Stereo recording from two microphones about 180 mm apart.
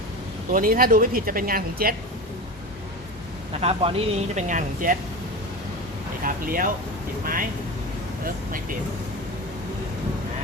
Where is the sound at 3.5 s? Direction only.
35° right (ahead or behind).